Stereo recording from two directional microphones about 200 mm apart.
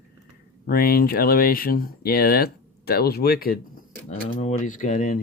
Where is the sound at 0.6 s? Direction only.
45° left (ahead or behind).